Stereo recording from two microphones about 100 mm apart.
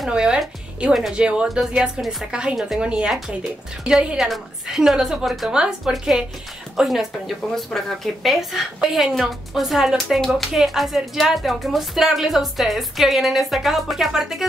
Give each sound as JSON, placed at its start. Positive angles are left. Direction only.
{"t": 0.0, "sound": "speech", "side_deg": -10}